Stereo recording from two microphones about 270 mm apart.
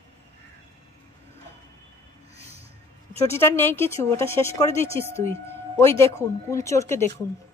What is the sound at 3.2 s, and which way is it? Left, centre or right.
Speech, centre.